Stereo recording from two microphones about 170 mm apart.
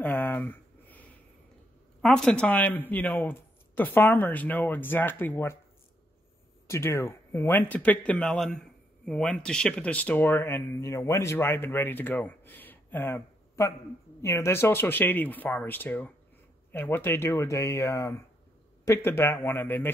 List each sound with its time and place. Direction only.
0.0 s a sound: 10° left (ahead or behind)
2.0 s speech: 5° left (ahead or behind)
6.7 s speech: 15° left (ahead or behind)